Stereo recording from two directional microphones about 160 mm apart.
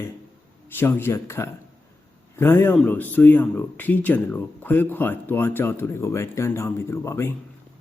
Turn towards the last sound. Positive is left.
turn(degrees=15)  # may be behind; listen again after turning